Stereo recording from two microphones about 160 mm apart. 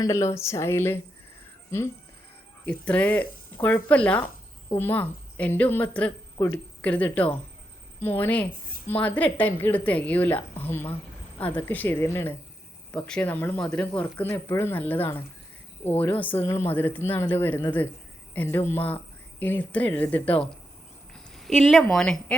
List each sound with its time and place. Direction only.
0.0 s speech: 20° left (ahead or behind)
2.6 s speech: 10° left (ahead or behind)